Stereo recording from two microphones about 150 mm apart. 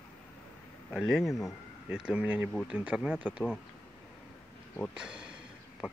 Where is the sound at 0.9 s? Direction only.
Centre (ahead or behind).